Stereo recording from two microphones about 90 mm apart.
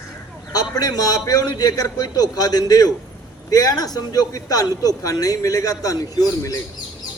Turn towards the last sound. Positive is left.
turn(degrees=40)  # may be behind; listen again after turning